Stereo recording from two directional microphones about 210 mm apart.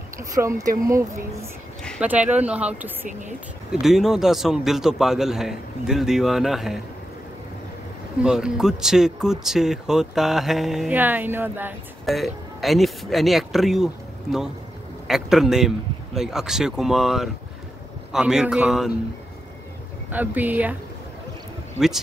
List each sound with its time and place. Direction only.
0.2 s speech: 15° right (ahead or behind)
1.8 s a sound: 5° left (ahead or behind)
2.0 s speech: 5° right (ahead or behind)
8.2 s speech: 5° right (ahead or behind)
15.0 s speech: centre (ahead or behind)
20.1 s speech: 10° right (ahead or behind)
21.7 s speech: centre (ahead or behind)